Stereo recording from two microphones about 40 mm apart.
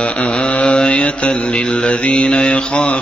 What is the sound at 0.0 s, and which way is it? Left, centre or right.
Mantra, left.